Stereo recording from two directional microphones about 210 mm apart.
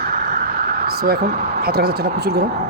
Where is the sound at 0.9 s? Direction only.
45° right (ahead or behind).